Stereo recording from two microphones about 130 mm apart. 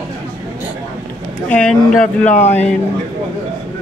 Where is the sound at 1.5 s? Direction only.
5° left (ahead or behind).